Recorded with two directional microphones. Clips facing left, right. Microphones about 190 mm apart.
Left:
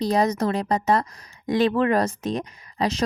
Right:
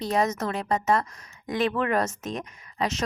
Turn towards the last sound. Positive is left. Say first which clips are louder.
# left 4 dB
turn(degrees=35)  # may be behind; listen again after turning